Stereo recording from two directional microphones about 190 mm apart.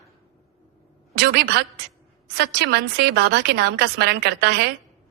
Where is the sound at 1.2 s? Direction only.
60° right (ahead or behind).